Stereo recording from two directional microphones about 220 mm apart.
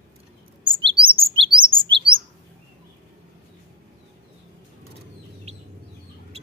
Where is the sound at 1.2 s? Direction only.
25° right (ahead or behind).